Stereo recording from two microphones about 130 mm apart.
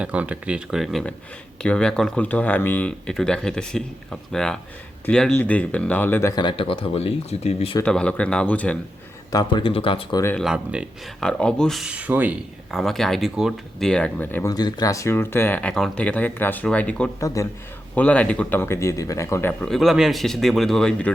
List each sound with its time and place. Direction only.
0.0 s speech: 10° right (ahead or behind); by 6.3 s 15° left (ahead or behind)
6.3 s speech: 40° left (ahead or behind)
7.9 s speech: 10° left (ahead or behind)
9.3 s speech: 35° left (ahead or behind)
10.5 s speech: 5° right (ahead or behind)
11.2 s speech: 5° left (ahead or behind); by 12.4 s 10° right (ahead or behind)
12.7 s speech: 5° left (ahead or behind)
14.4 s speech: 30° left (ahead or behind); by 17.1 s 10° left (ahead or behind)
17.2 s a man's voice: 25° left (ahead or behind)
17.9 s speech: 10° left (ahead or behind)
19.6 s speech: centre (ahead or behind)